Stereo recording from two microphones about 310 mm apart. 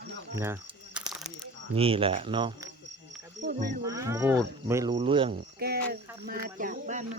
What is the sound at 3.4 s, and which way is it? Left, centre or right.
Speech, right.